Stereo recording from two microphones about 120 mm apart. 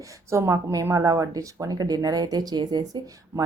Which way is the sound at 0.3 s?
25° right (ahead or behind).